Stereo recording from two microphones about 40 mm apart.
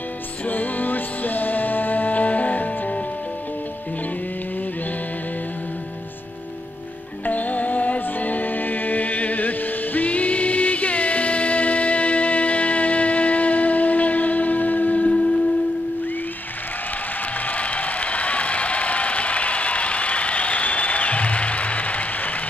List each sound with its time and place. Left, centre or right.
0.5 s music: left
7.2 s music: left
17.5 s a sound: left